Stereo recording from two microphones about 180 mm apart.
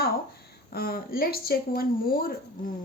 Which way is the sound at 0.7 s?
60° left (ahead or behind).